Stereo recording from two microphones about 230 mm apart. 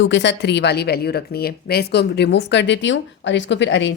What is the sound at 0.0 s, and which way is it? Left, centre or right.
Speech, left.